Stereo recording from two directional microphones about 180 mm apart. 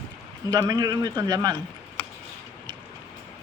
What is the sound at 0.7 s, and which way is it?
Speech, 20° right (ahead or behind).